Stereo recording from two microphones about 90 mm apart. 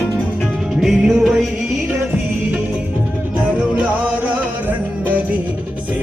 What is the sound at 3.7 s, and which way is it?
Music, 15° right (ahead or behind).